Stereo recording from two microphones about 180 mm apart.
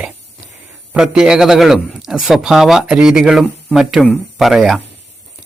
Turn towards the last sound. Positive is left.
turn(degrees=0)  # may be behind; listen again after turning